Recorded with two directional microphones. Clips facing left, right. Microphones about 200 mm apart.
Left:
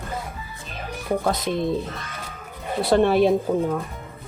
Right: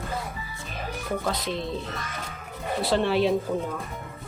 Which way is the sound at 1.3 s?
50° left (ahead or behind).